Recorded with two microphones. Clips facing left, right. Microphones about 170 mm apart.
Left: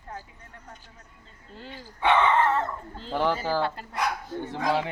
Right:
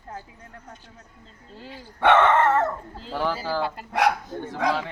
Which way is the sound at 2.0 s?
65° right (ahead or behind).